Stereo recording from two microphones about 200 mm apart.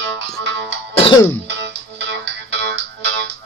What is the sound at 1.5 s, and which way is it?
Music, 60° right (ahead or behind).